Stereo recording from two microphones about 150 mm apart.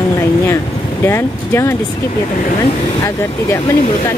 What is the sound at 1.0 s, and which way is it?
Speech, 15° left (ahead or behind).